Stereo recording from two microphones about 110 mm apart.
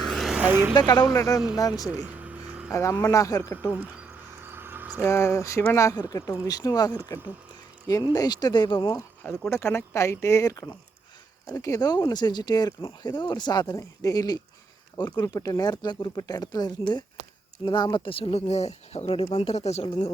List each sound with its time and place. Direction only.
0.1 s vehicle: centre (ahead or behind)
0.4 s speech: 20° right (ahead or behind)
0.7 s speech: 40° left (ahead or behind)
1.1 s speech: 30° left (ahead or behind)
1.9 s vehicle: 15° right (ahead or behind)
2.6 s speech: 25° left (ahead or behind)
4.4 s a sound: 20° right (ahead or behind)
5.0 s speech: 25° left (ahead or behind)
8.1 s speech: 35° left (ahead or behind)
9.5 s speech: 25° left (ahead or behind); by 20.1 s 70° left (ahead or behind)